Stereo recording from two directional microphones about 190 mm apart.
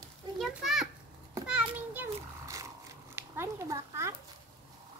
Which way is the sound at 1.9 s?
15° right (ahead or behind).